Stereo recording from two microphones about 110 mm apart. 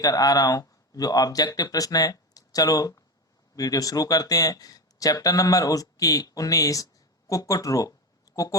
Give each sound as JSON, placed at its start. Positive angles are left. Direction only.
{"t": 0.0, "sound": "speech", "side_deg": 35}